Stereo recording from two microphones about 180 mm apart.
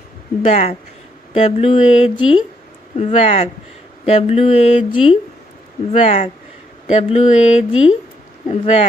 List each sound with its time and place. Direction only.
0.5 s speech: 35° left (ahead or behind)